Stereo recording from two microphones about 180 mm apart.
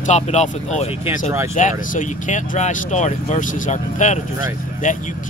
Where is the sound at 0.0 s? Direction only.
40° left (ahead or behind).